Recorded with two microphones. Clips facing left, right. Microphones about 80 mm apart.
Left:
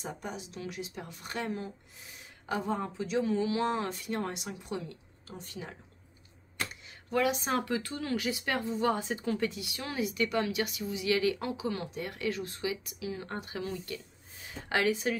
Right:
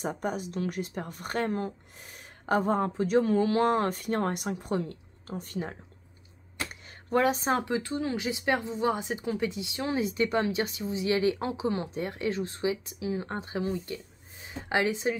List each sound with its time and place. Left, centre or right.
0.0 s speech: right
6.7 s a sound: right
7.5 s speech: right